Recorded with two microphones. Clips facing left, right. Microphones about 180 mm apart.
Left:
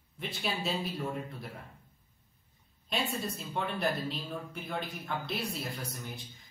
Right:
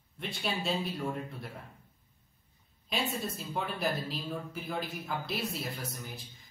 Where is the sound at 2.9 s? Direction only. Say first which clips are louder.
Even; centre (ahead or behind).